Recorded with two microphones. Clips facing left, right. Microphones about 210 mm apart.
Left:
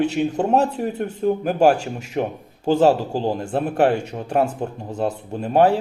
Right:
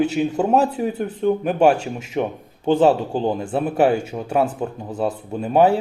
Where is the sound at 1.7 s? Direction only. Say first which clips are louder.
Even; 40° left (ahead or behind).